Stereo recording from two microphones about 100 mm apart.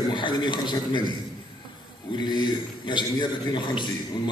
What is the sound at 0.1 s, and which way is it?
A man's voice, 50° left (ahead or behind).